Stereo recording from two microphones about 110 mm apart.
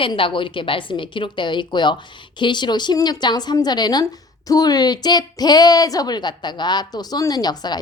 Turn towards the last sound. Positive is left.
turn(degrees=40)  # may be behind; listen again after turning